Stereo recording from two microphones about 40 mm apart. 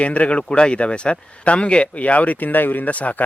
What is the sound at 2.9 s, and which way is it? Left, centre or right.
Speech, left.